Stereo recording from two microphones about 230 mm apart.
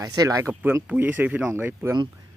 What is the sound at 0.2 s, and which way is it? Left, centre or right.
Speech, centre.